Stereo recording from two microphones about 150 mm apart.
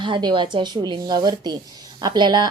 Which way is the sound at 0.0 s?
30° right (ahead or behind).